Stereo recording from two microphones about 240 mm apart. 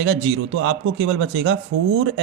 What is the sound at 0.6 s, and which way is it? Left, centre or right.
Speech, right.